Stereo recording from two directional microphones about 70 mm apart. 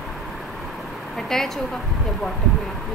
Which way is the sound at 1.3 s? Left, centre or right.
Centre.